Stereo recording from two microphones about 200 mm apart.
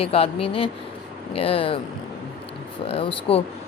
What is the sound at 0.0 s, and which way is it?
Speech, 30° left (ahead or behind).